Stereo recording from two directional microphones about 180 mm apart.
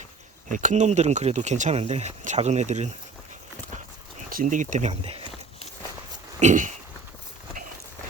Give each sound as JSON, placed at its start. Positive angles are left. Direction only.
{"t": 0.5, "sound": "speech", "side_deg": -45}
{"t": 4.3, "sound": "speech", "side_deg": -50}
{"t": 6.4, "sound": "speech", "side_deg": -45}